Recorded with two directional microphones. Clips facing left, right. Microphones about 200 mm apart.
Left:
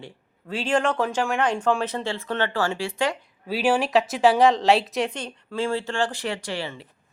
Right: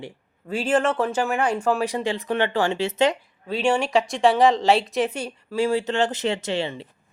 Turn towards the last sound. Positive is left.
turn(degrees=-25)  # may be behind; listen again after turning